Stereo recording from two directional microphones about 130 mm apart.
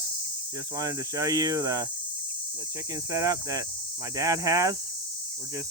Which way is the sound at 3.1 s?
25° right (ahead or behind).